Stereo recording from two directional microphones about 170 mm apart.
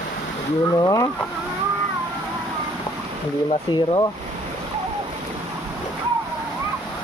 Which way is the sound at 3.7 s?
25° left (ahead or behind).